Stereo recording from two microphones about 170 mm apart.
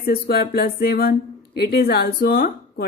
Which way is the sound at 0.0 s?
60° left (ahead or behind).